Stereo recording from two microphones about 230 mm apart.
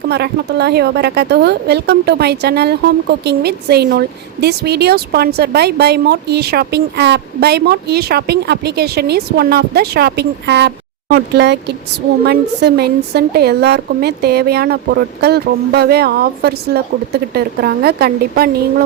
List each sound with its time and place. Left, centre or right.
0.1 s a woman's voice: right